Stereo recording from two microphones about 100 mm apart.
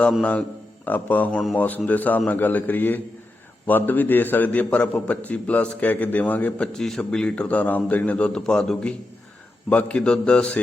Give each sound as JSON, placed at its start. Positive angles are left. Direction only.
{"t": 0.1, "sound": "a man's voice", "side_deg": 10}
{"t": 6.7, "sound": "a man's voice", "side_deg": 5}